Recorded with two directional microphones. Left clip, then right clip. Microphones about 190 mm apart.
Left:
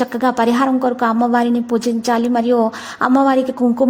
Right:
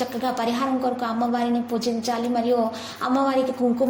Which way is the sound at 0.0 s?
50° left (ahead or behind).